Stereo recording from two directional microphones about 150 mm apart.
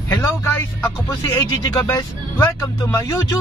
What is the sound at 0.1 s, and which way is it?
Vehicle, 15° left (ahead or behind).